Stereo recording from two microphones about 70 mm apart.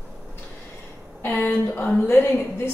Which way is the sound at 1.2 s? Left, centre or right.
Left.